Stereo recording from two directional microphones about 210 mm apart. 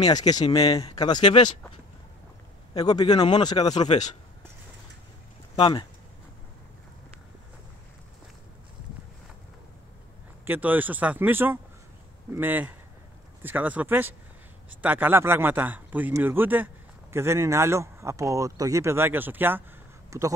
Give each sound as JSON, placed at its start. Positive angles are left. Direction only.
{"t": 0.0, "sound": "speech", "side_deg": 20}
{"t": 2.7, "sound": "speech", "side_deg": 20}
{"t": 5.6, "sound": "speech", "side_deg": 25}
{"t": 10.4, "sound": "a man's voice", "side_deg": -10}